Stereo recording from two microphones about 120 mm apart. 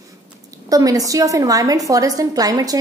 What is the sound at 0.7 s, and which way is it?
A woman's voice, 30° right (ahead or behind).